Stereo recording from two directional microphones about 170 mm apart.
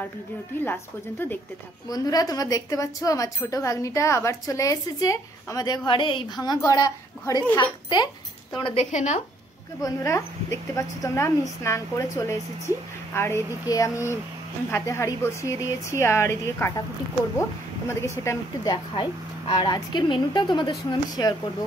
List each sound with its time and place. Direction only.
0.6 s speech: 10° left (ahead or behind)
1.9 s speech: 20° left (ahead or behind)
8.6 s speech: 40° left (ahead or behind)
9.8 s speech: 20° left (ahead or behind)